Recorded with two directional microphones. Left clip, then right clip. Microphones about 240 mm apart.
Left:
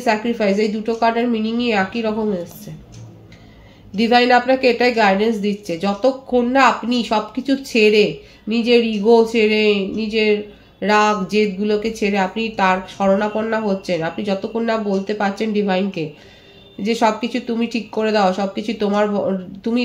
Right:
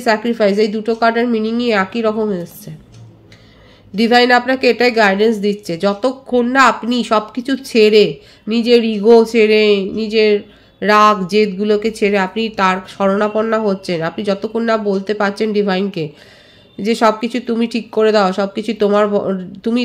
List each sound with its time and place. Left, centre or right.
0.0 s a woman's voice: right
3.9 s a woman's voice: right